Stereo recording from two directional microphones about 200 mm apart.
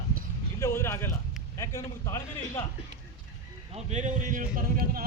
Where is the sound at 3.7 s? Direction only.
35° right (ahead or behind).